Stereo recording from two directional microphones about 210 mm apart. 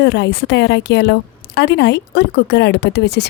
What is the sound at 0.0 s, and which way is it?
Speech, 55° left (ahead or behind).